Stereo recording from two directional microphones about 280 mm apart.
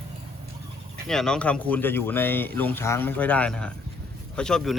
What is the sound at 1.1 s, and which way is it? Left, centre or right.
Speech, centre.